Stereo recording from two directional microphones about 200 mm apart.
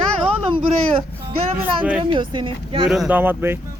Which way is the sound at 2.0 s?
25° right (ahead or behind).